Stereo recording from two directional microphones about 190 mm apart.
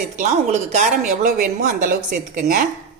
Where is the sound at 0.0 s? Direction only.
40° right (ahead or behind).